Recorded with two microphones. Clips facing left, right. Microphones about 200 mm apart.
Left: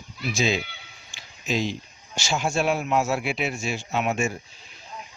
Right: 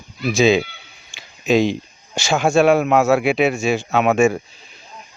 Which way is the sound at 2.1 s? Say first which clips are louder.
Right 9 dB; 65° right (ahead or behind).